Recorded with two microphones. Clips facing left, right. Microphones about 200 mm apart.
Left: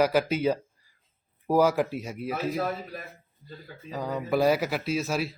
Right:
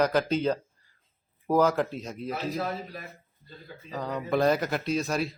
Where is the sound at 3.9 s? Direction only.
10° left (ahead or behind).